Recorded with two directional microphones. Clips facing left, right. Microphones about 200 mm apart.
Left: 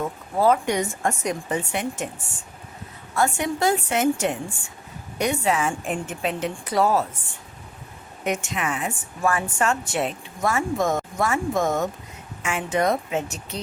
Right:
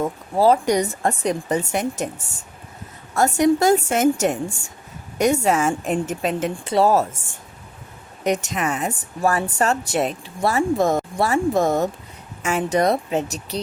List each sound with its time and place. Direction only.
0.3 s a woman's voice: 35° right (ahead or behind)
6.7 s speech: 30° right (ahead or behind)
8.2 s a woman's voice: 40° right (ahead or behind)